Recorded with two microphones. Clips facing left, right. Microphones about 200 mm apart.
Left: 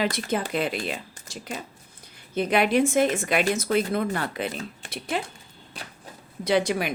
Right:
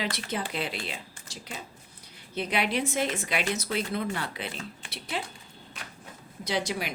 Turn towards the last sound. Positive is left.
turn(degrees=55)  # may be behind; listen again after turning